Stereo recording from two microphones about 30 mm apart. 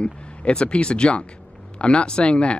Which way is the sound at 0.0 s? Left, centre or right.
Left.